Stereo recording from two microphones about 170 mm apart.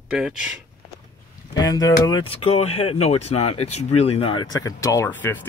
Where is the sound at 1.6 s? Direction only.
20° left (ahead or behind).